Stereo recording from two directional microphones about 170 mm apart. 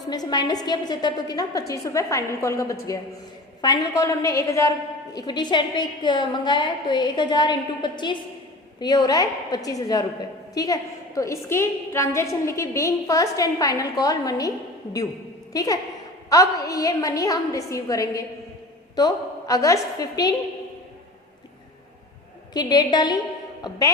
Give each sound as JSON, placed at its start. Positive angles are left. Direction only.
{"t": 0.1, "sound": "a woman's voice", "side_deg": 25}
{"t": 15.5, "sound": "a woman's voice", "side_deg": 20}
{"t": 22.5, "sound": "a woman's voice", "side_deg": 25}